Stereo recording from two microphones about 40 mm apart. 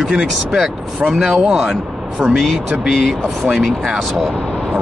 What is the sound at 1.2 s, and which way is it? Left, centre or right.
Speech, centre.